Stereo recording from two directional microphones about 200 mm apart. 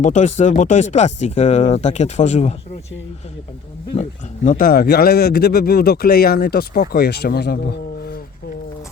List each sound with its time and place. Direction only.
0.0 s speech: 35° left (ahead or behind)
4.4 s speech: 45° left (ahead or behind)